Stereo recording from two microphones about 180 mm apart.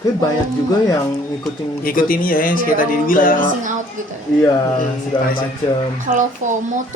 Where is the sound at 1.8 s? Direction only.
50° left (ahead or behind).